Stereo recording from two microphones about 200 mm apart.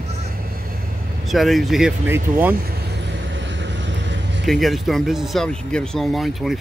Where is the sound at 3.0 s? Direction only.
65° right (ahead or behind).